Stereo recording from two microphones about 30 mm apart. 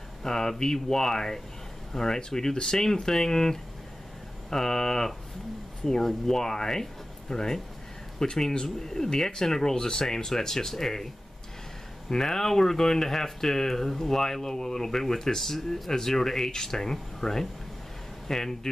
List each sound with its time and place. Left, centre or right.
0.2 s speech: centre
12.1 s speech: centre